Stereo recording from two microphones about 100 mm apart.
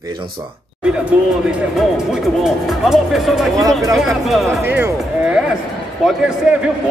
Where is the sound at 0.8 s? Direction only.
10° right (ahead or behind).